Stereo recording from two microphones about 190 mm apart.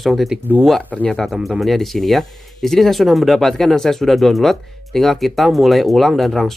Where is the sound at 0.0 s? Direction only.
Centre (ahead or behind).